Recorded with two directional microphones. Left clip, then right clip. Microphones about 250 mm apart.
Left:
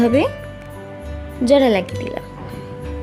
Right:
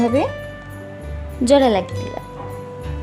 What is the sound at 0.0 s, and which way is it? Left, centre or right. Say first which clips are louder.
Speech: left 2 dB; centre.